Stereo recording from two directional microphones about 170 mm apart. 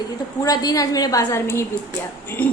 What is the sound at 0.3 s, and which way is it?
A woman's voice, 20° left (ahead or behind).